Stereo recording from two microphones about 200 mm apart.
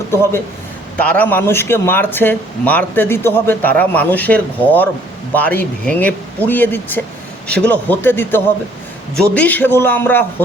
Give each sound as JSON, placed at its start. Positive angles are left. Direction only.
{"t": 0.1, "sound": "a man's voice", "side_deg": 10}